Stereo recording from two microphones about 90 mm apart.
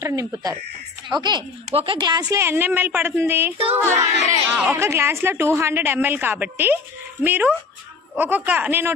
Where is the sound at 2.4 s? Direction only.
25° right (ahead or behind).